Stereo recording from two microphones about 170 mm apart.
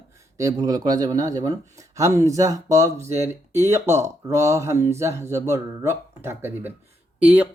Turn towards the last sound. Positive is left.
turn(degrees=-10)  # may be behind; listen again after turning